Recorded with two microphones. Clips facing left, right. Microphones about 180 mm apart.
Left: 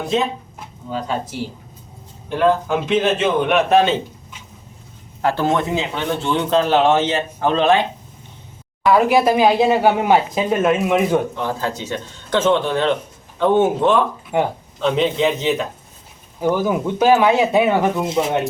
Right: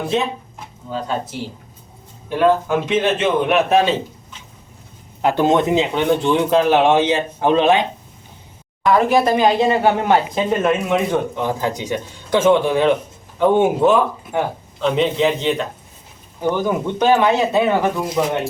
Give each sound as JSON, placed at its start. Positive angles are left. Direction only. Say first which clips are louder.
{"t": 0.1, "sound": "a man's voice", "louder": "left 3 dB", "side_deg": 0}
{"t": 2.3, "sound": "a man's voice", "louder": "right 1 dB", "side_deg": 0}
{"t": 5.2, "sound": "speech", "louder": "right 3 dB", "side_deg": -20}
{"t": 8.8, "sound": "speech", "louder": "left 1 dB", "side_deg": 5}
{"t": 11.3, "sound": "a man's voice", "louder": "right 2 dB", "side_deg": -15}